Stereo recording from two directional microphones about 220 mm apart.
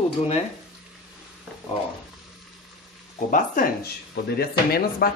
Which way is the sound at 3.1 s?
35° left (ahead or behind).